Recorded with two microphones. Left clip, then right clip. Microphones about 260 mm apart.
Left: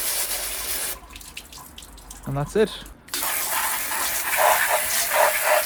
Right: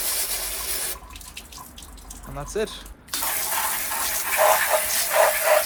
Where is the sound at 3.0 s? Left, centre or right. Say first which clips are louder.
Left 1 dB; centre.